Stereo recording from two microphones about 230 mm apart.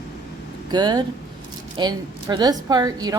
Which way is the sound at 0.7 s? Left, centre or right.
Centre.